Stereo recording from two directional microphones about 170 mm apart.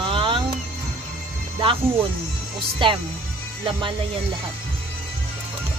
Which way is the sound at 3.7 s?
30° right (ahead or behind).